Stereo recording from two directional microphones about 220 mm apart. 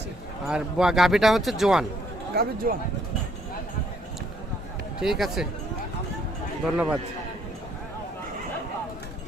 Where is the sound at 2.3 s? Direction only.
45° right (ahead or behind).